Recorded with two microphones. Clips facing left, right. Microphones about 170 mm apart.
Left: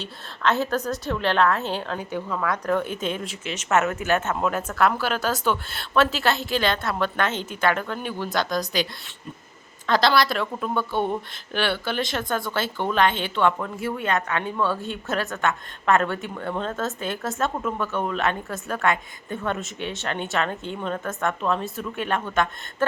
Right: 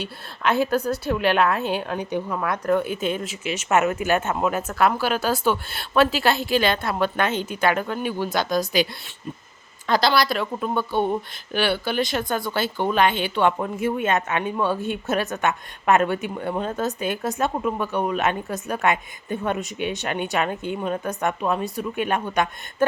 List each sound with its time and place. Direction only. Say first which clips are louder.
0.0 s speech: even; 10° right (ahead or behind)
2.6 s speech: right 5 dB; 5° right (ahead or behind)
13.6 s speech: right 4 dB; 20° right (ahead or behind)